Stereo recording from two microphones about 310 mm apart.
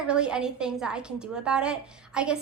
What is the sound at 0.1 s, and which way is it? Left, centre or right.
A child's voice, centre.